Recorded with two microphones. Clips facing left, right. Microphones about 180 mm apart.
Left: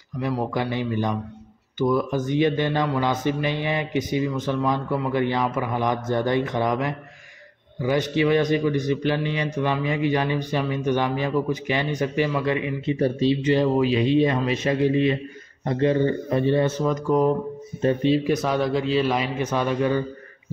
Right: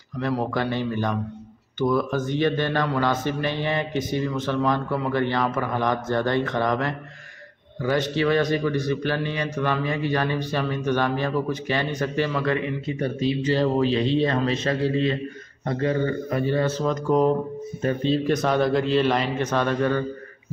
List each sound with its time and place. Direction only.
0.2 s a man's voice: 10° left (ahead or behind)
13.0 s a man's voice: 30° left (ahead or behind)
16.8 s a man's voice: 5° left (ahead or behind)